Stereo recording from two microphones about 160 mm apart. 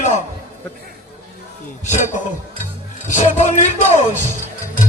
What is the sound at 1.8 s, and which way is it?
Music, 50° left (ahead or behind).